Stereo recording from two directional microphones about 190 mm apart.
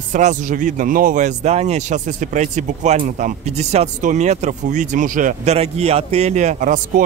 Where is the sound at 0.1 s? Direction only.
40° right (ahead or behind).